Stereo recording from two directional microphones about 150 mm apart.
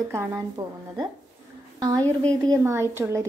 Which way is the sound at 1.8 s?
25° right (ahead or behind).